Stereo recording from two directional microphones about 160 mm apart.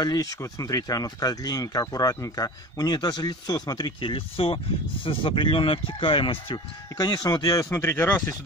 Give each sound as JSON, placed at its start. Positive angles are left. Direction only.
{"t": 0.0, "sound": "speech", "side_deg": 25}